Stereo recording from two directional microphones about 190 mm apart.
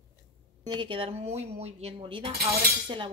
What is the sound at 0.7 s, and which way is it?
Speech, 25° right (ahead or behind).